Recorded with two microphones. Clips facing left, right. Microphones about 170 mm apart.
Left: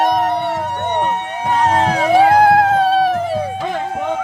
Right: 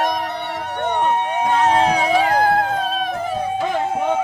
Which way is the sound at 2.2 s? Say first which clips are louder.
Left 10 dB; 70° left (ahead or behind).